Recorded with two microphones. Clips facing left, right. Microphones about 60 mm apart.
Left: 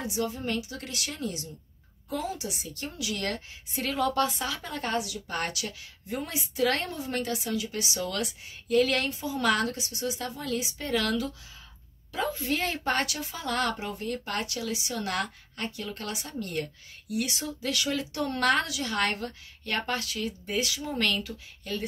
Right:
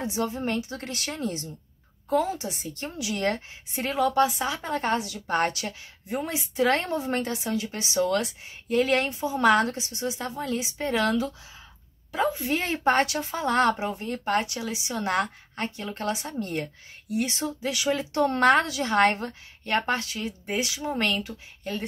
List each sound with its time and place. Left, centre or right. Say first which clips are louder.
0.0 s a woman's voice: right 3 dB; right
4.0 s a woman's voice: right 5 dB; centre
12.4 s a woman's voice: right 2 dB; right